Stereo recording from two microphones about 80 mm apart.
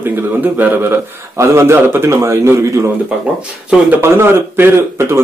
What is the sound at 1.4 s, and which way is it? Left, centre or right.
Speech, right.